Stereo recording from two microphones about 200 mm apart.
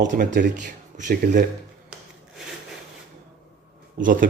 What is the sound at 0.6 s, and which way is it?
Speech, 40° right (ahead or behind).